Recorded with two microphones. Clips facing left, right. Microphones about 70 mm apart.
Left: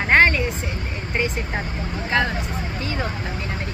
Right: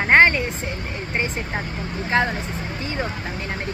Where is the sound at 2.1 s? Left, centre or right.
Right.